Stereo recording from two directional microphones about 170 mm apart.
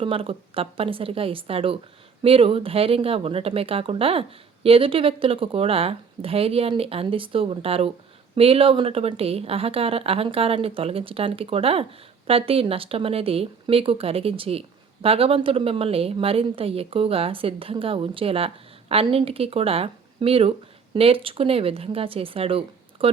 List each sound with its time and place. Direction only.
0.0 s speech: 35° right (ahead or behind)